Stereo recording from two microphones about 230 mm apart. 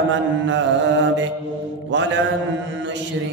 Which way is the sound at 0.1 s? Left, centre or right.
Right.